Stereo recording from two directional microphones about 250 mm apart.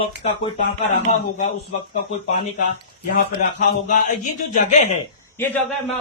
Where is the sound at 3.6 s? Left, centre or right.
Left.